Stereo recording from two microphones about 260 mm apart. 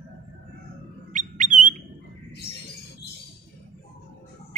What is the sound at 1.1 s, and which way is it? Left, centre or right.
Bird, right.